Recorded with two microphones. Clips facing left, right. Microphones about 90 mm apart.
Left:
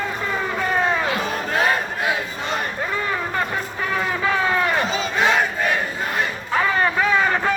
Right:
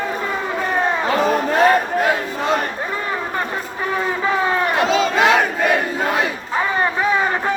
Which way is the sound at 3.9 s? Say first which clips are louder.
Right 2 dB; 25° right (ahead or behind).